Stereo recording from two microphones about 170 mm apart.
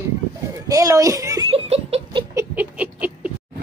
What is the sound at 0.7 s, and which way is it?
Speech, 20° right (ahead or behind).